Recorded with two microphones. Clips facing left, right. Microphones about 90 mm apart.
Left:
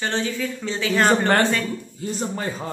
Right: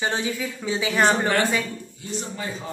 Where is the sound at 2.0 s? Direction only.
45° left (ahead or behind).